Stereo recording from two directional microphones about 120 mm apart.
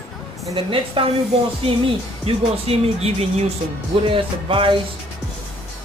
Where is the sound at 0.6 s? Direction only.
45° right (ahead or behind).